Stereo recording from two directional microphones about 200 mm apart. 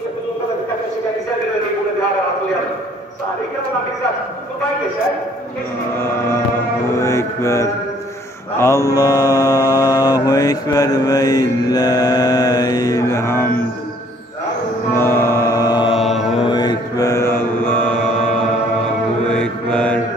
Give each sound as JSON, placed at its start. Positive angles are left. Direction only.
{"t": 5.9, "sound": "chant", "side_deg": 10}
{"t": 7.0, "sound": "mantra", "side_deg": 15}
{"t": 15.0, "sound": "music", "side_deg": 15}
{"t": 16.0, "sound": "mantra", "side_deg": 0}
{"t": 16.3, "sound": "mantra", "side_deg": 20}